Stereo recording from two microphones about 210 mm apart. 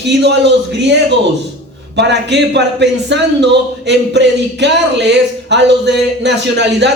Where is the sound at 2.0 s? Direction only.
55° right (ahead or behind).